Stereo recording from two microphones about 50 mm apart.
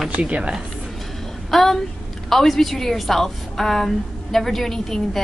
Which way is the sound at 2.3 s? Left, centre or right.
Centre.